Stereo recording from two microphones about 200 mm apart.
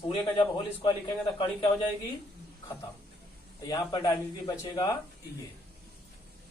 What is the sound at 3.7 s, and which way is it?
A man's voice, 15° left (ahead or behind).